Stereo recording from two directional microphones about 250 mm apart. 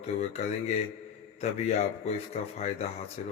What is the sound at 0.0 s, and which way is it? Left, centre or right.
A man's voice, left.